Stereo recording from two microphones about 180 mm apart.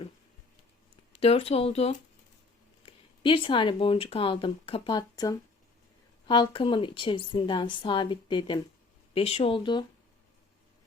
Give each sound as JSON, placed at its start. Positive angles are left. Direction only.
{"t": 1.1, "sound": "a woman's voice", "side_deg": 35}